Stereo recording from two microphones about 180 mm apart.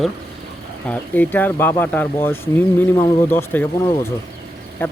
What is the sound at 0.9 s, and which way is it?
Speech, 10° left (ahead or behind).